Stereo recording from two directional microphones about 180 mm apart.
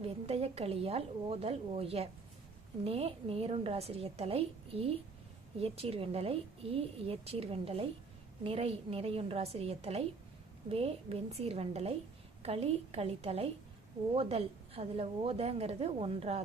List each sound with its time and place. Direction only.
0.0 s a woman's voice: 35° right (ahead or behind)